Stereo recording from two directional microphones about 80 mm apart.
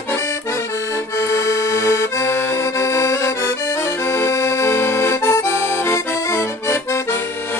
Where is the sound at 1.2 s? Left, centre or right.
Left.